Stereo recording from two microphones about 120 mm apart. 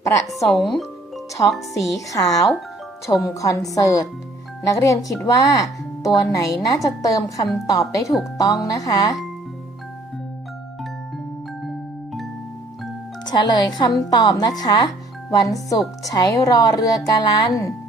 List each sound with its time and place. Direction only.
0.4 s speech: centre (ahead or behind)
2.0 s speech: 30° left (ahead or behind)
13.2 s speech: 35° left (ahead or behind)